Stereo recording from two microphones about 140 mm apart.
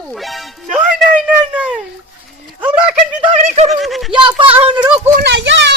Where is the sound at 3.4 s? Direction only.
55° right (ahead or behind).